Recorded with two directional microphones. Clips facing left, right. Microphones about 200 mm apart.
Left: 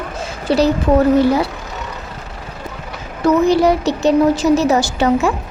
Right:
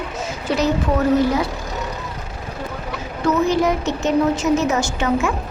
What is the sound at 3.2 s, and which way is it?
A woman's voice, 35° left (ahead or behind).